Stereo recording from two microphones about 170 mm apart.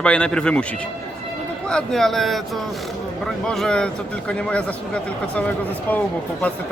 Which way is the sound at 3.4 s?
5° left (ahead or behind).